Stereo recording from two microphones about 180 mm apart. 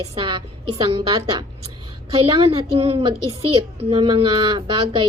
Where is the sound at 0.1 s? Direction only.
30° right (ahead or behind).